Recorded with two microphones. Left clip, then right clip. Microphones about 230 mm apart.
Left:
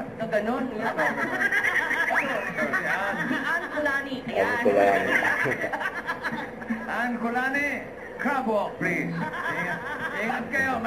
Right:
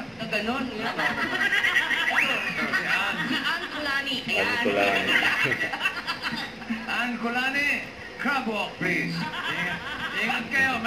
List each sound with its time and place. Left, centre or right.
0.3 s chuckle: centre
6.9 s a man's voice: centre
10.1 s speech: centre